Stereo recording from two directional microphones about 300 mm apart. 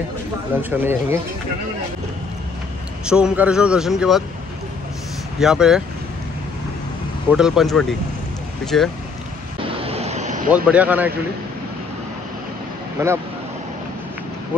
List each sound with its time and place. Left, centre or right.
0.6 s speech: centre
3.1 s a man's voice: centre
5.4 s a man's voice: centre
7.2 s a man's voice: centre
9.8 s vehicle: right
10.5 s a man's voice: centre
13.0 s speech: centre